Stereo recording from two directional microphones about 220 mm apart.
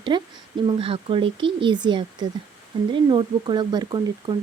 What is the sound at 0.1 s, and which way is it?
Speech, 20° right (ahead or behind).